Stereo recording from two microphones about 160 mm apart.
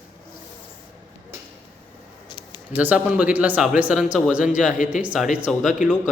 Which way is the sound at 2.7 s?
10° right (ahead or behind).